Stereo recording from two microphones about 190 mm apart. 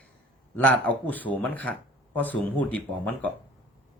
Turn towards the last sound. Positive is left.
turn(degrees=10)  # may be behind; listen again after turning